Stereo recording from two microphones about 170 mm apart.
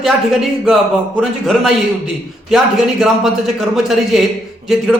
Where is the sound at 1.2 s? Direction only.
Centre (ahead or behind).